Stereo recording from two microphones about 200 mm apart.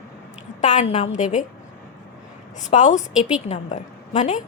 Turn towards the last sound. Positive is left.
turn(degrees=35)  # may be behind; listen again after turning